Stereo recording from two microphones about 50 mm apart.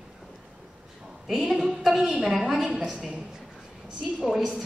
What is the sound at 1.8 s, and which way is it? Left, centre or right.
A woman's voice, centre.